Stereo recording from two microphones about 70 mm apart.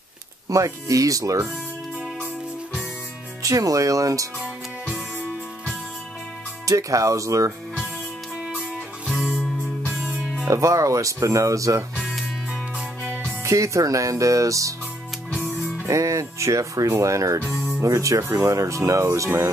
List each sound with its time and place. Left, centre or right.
0.5 s speech: right
3.4 s speech: right
6.6 s speech: right
8.5 s music: centre
10.5 s speech: right
13.4 s speech: right
15.9 s speech: right